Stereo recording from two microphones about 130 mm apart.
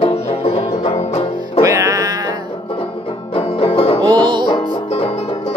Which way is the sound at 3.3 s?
45° left (ahead or behind).